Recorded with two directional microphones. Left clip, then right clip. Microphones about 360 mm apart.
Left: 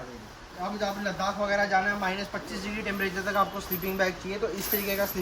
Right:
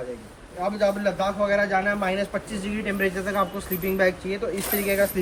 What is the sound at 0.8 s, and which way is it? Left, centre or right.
A man's voice, centre.